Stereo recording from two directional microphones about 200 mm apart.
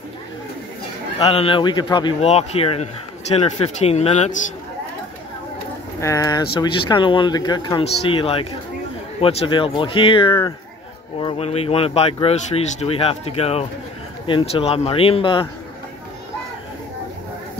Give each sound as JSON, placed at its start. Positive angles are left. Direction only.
{"t": 1.3, "sound": "a man's voice", "side_deg": 25}
{"t": 5.9, "sound": "speech", "side_deg": 15}